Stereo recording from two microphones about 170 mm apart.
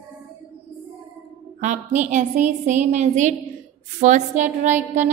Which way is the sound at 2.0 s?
45° right (ahead or behind).